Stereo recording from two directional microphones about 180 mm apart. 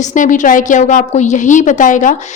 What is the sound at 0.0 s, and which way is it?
A woman's voice, 45° left (ahead or behind).